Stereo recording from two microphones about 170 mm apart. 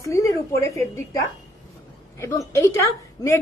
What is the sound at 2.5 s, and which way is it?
Speech, 15° left (ahead or behind).